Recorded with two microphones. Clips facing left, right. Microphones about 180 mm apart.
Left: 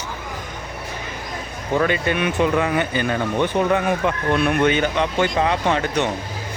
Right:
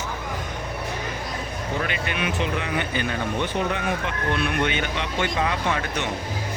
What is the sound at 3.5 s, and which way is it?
Speech, 50° left (ahead or behind).